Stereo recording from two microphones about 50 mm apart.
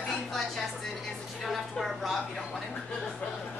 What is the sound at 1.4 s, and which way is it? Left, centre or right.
Speech, centre.